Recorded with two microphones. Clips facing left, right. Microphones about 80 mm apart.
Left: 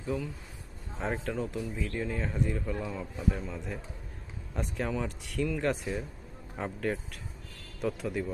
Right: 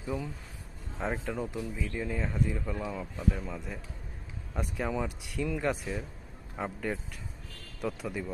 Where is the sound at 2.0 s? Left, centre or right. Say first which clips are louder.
Right 1 dB; centre.